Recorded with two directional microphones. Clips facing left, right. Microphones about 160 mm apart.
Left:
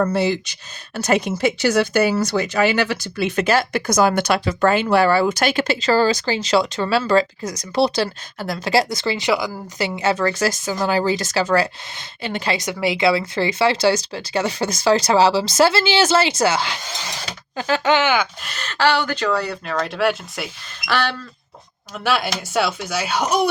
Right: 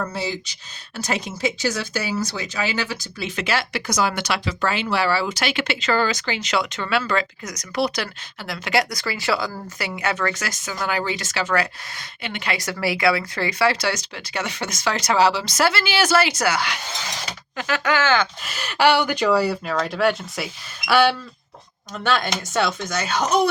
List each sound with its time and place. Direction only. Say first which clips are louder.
0.0 s speech: left 8 dB; 60° left (ahead or behind)
3.3 s speech: left 6 dB; 45° left (ahead or behind); by 9.8 s 15° left (ahead or behind)
9.8 s speech: left 5 dB; 30° left (ahead or behind)
12.5 s speech: left 3 dB; 20° left (ahead or behind)
18.4 s speech: right 1 dB; 10° right (ahead or behind)
21.9 s speech: left 1 dB; 5° left (ahead or behind)